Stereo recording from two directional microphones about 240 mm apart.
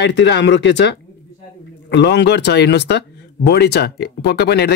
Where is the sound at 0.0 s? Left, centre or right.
Left.